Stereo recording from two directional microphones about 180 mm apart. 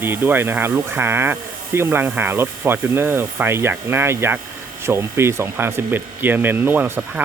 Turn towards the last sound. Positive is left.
turn(degrees=-10)  # may be behind; listen again after turning